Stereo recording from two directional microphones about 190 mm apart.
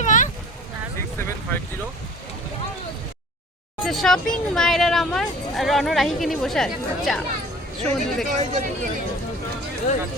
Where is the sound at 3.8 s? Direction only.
Centre (ahead or behind).